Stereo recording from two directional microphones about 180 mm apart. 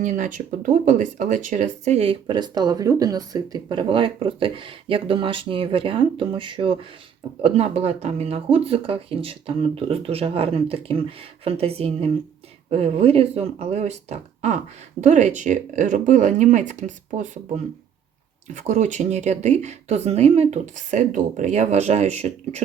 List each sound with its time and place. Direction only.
0.0 s speech: 45° right (ahead or behind)